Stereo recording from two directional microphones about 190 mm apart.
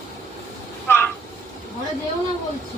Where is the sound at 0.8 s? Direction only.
10° left (ahead or behind).